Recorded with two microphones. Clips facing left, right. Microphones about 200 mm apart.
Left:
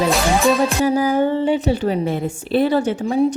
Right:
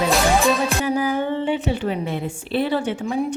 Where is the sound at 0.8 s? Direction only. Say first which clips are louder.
Left 5 dB; 40° left (ahead or behind).